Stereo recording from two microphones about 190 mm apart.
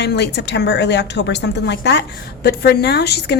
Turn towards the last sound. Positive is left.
turn(degrees=60)  # may be behind; listen again after turning